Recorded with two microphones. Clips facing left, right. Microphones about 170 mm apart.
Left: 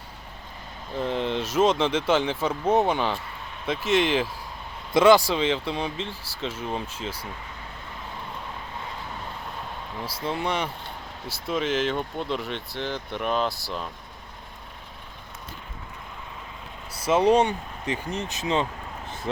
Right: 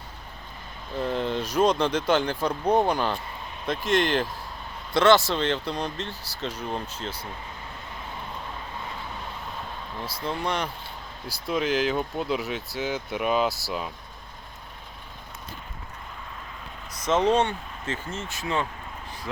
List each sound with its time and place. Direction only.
0.9 s speech: centre (ahead or behind)
10.2 s speech: 5° left (ahead or behind)
16.9 s speech: 10° left (ahead or behind)